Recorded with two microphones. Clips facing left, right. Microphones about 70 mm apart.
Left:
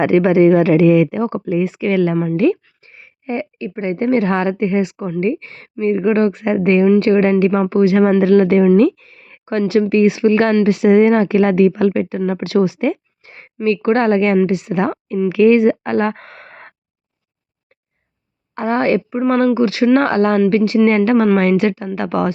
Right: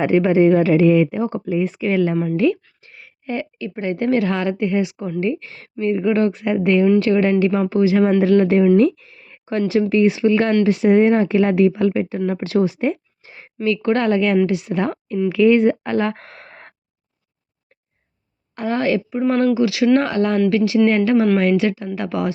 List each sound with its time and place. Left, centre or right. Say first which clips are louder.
0.0 s speech: left 3 dB; left
2.4 s speech: left 3 dB; left
2.8 s a woman's voice: left 3 dB; left
13.2 s a sound: left 1 dB; left
13.7 s speech: left 3 dB; left
15.3 s speech: left 3 dB; left
18.5 s a woman's voice: left 4 dB; left